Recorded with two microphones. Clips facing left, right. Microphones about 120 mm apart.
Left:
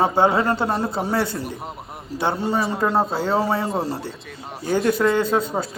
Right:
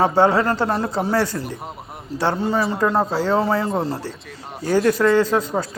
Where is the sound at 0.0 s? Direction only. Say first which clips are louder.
Right 2 dB; 20° left (ahead or behind).